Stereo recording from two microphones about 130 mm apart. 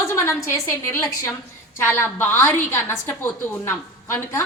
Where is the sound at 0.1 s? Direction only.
20° left (ahead or behind).